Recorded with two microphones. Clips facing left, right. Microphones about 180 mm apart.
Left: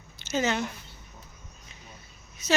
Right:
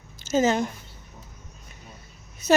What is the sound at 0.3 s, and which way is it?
Speech, 45° right (ahead or behind).